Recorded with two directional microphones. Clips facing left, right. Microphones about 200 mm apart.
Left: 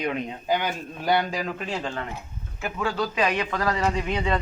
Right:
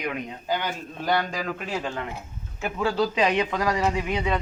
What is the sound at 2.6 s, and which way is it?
Speech, 25° right (ahead or behind).